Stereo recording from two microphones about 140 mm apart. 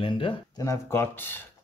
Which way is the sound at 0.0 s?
35° left (ahead or behind).